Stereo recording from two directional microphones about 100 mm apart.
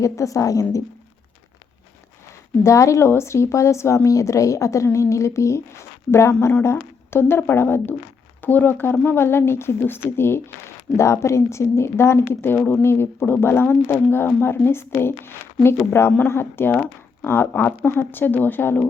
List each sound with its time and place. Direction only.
0.0 s speech: 35° left (ahead or behind)
2.6 s speech: 30° left (ahead or behind)